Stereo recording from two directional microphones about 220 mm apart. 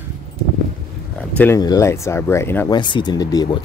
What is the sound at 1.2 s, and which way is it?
Speech, 10° left (ahead or behind).